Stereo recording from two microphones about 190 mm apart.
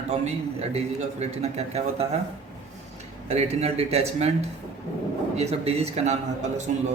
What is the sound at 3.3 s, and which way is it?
Speech, 35° right (ahead or behind).